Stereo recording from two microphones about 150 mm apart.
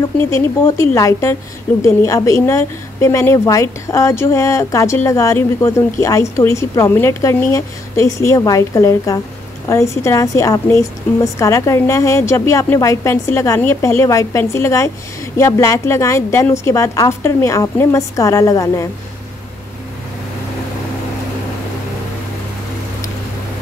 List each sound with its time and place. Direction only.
0.2 s a woman's voice: 20° left (ahead or behind)